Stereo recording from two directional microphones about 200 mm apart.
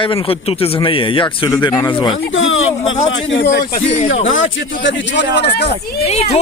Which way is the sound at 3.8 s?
35° left (ahead or behind).